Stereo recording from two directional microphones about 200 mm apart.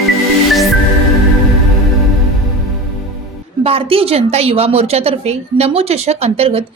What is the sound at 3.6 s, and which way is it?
A woman's voice, 30° right (ahead or behind).